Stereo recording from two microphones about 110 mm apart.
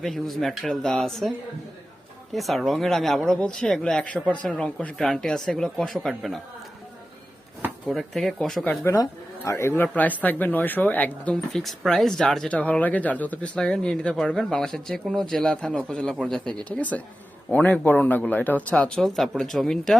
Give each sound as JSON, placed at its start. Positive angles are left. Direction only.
{"t": 0.0, "sound": "speech", "side_deg": 0}
{"t": 2.3, "sound": "speech", "side_deg": 0}
{"t": 7.9, "sound": "speech", "side_deg": 0}
{"t": 8.6, "sound": "speech", "side_deg": 20}
{"t": 11.5, "sound": "speech", "side_deg": 0}
{"t": 16.6, "sound": "speech", "side_deg": 15}